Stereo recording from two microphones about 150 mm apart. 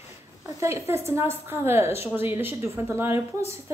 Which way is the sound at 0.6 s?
15° right (ahead or behind).